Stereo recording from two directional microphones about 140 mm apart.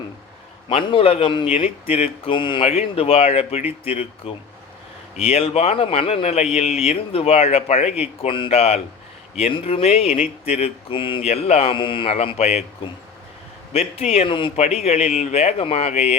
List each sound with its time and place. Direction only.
0.7 s a man's voice: 40° left (ahead or behind)
12.1 s speech: 50° left (ahead or behind)
14.5 s speech: 50° left (ahead or behind)